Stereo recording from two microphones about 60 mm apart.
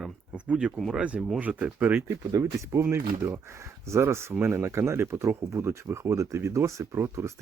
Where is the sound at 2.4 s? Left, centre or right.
Right.